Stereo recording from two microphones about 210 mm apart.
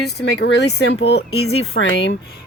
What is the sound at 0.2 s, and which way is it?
Speech, 50° left (ahead or behind).